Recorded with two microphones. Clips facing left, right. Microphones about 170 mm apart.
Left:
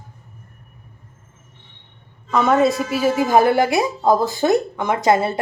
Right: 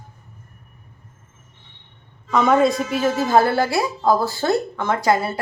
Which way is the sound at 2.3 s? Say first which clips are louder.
Even; centre (ahead or behind).